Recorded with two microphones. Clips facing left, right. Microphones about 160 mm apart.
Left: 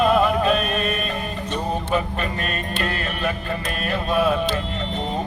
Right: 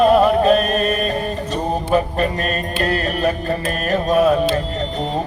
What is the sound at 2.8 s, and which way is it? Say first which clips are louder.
Mantra: right 8 dB; 40° right (ahead or behind).